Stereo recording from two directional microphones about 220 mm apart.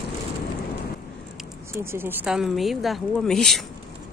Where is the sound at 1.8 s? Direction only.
10° right (ahead or behind).